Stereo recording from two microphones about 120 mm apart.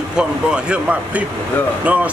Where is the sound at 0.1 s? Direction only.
5° right (ahead or behind).